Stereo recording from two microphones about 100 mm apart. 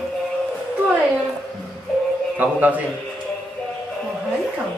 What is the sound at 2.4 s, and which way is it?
Speech, 15° right (ahead or behind).